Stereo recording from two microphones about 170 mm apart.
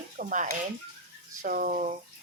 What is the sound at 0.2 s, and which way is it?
A woman's voice, 50° right (ahead or behind).